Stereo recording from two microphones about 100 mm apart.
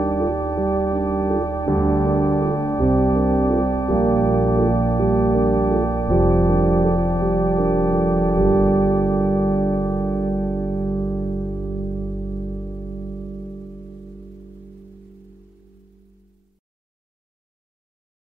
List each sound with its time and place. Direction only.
0.0 s music: 35° left (ahead or behind)